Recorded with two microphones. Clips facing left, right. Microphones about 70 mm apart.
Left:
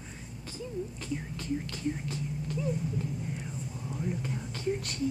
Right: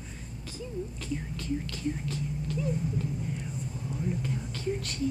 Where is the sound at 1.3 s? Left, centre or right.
Left.